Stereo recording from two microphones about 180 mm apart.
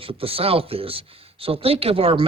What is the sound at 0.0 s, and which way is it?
Speech, 30° right (ahead or behind).